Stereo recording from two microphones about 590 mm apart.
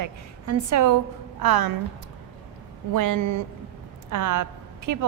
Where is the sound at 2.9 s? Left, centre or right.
Right.